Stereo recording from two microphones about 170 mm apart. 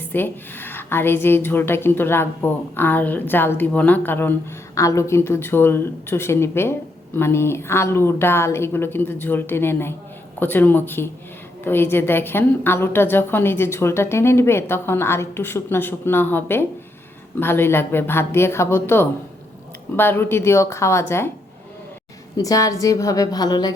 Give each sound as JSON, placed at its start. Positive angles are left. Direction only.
{"t": 0.0, "sound": "a woman's voice", "side_deg": 10}
{"t": 22.4, "sound": "a woman's voice", "side_deg": 20}